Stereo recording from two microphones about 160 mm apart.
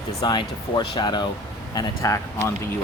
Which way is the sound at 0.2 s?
30° left (ahead or behind).